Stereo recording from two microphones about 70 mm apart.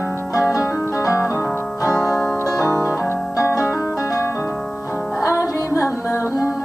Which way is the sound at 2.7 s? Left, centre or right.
Left.